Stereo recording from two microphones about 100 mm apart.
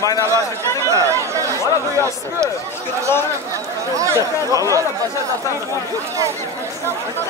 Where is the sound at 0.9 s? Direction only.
30° right (ahead or behind).